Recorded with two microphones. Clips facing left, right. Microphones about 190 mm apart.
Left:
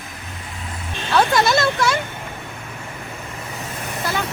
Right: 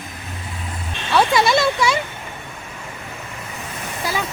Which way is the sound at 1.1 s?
Centre (ahead or behind).